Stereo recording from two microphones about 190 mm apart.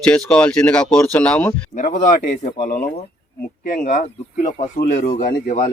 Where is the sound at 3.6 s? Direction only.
45° left (ahead or behind).